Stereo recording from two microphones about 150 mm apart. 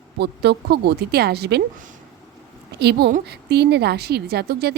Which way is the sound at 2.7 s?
90° right.